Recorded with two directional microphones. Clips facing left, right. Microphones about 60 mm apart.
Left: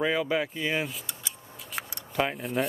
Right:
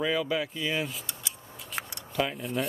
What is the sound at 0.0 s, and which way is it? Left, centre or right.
Speech, left.